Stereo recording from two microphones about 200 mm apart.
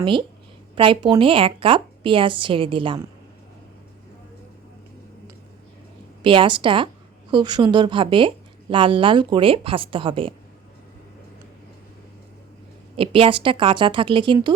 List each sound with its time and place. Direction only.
0.0 s a woman's voice: 25° right (ahead or behind)
6.2 s a woman's voice: 25° right (ahead or behind)
13.0 s a woman's voice: 25° right (ahead or behind)